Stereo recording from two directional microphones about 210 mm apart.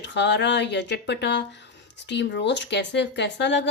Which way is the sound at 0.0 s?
55° left (ahead or behind).